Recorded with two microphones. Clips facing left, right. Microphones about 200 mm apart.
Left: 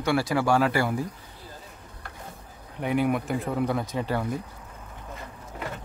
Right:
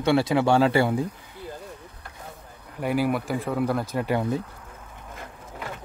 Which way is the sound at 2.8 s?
5° right (ahead or behind).